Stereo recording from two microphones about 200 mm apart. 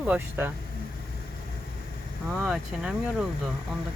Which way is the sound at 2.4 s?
5° right (ahead or behind).